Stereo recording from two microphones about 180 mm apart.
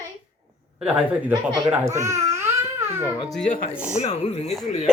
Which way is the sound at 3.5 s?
45° left (ahead or behind).